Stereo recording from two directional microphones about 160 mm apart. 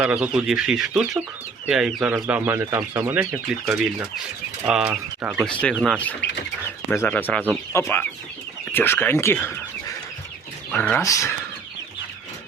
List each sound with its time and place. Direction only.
0.0 s speech: 5° right (ahead or behind)
3.2 s speech: 5° right (ahead or behind)
5.5 s speech: 5° left (ahead or behind)
10.7 s speech: 10° left (ahead or behind)
11.0 s speech: 20° left (ahead or behind)